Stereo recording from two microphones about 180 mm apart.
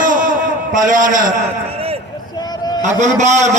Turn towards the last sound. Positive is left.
turn(degrees=-40)  # may be behind; listen again after turning